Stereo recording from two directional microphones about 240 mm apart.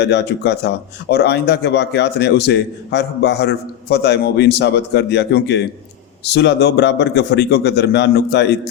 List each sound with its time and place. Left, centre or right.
0.0 s speech: left